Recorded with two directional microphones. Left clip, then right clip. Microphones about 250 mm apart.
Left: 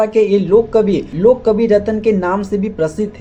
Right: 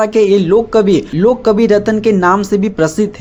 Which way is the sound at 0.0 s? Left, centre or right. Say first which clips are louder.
Right 2 dB; right.